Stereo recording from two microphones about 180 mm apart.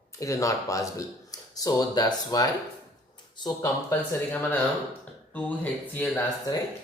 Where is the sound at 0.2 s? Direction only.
15° left (ahead or behind).